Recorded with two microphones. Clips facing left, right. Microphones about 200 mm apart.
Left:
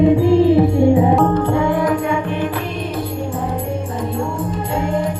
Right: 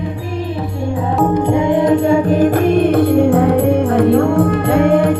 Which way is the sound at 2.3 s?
40° right (ahead or behind).